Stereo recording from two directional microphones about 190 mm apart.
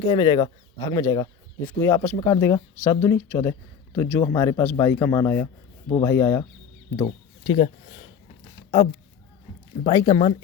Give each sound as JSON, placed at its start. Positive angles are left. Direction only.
{"t": 0.1, "sound": "speech", "side_deg": 25}
{"t": 7.5, "sound": "speech", "side_deg": 30}
{"t": 9.8, "sound": "speech", "side_deg": 20}